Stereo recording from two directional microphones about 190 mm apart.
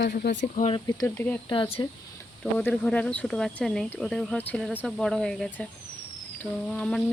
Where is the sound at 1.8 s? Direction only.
20° left (ahead or behind).